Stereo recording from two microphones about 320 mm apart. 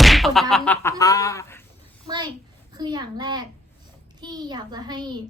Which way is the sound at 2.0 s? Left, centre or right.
Centre.